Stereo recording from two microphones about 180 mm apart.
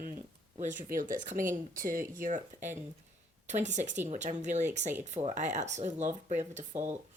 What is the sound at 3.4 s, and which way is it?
Speech, 40° right (ahead or behind).